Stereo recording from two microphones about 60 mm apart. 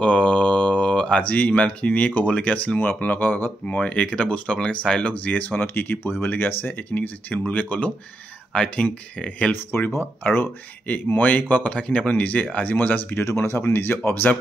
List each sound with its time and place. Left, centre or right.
0.0 s speech: left
3.6 s speech: left
9.5 s speech: left
13.2 s speech: left